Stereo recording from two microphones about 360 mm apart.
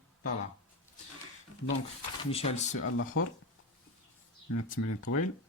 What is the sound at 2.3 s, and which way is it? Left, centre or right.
Speech, centre.